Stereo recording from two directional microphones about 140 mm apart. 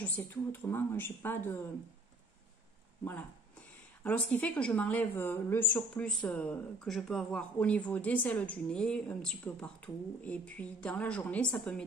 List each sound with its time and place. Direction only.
0.0 s speech: 15° left (ahead or behind)
3.0 s speech: 15° left (ahead or behind)